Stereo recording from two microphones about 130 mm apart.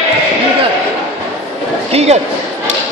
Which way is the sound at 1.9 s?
55° right (ahead or behind).